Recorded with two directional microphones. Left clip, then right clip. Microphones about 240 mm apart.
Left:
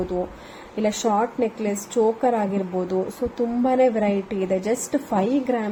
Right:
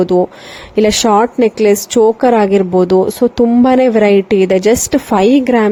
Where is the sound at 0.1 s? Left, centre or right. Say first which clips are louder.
Right 15 dB; right.